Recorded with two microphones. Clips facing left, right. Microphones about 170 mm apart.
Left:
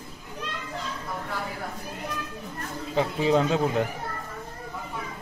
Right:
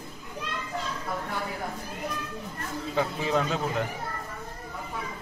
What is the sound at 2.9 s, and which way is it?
Speech, 25° left (ahead or behind).